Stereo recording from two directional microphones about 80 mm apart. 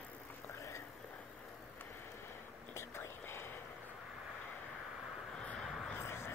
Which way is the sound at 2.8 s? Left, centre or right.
Left.